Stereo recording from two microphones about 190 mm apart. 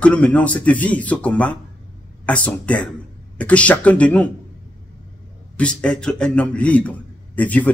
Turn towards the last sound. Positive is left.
turn(degrees=10)  # may be behind; listen again after turning